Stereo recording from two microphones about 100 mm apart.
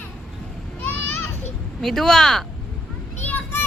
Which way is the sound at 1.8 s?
Centre (ahead or behind).